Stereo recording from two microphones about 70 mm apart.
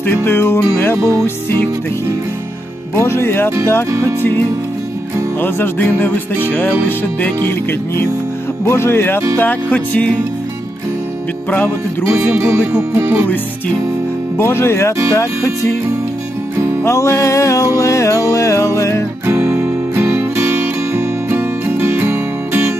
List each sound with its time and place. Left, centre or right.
0.3 s music: left
2.9 s music: left
5.4 s music: left
12.1 s music: right
14.3 s music: left
16.8 s music: left
19.2 s music: right